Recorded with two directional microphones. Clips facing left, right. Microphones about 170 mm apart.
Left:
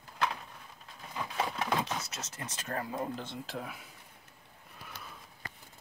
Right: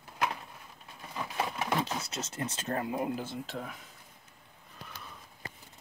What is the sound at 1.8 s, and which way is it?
Speech, 30° right (ahead or behind).